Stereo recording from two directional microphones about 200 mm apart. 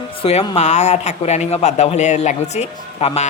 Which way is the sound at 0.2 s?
30° left (ahead or behind).